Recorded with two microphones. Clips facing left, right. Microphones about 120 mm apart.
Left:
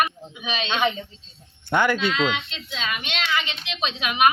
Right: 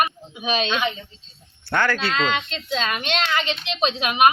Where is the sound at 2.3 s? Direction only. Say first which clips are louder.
Right 5 dB; 50° right (ahead or behind).